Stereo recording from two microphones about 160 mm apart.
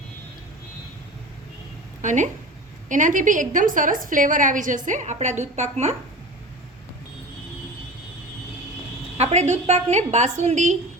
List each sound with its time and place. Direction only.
2.0 s a woman's voice: 50° right (ahead or behind)
9.1 s a woman's voice: 45° right (ahead or behind)